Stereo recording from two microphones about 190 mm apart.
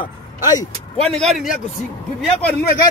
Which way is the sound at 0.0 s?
20° left (ahead or behind).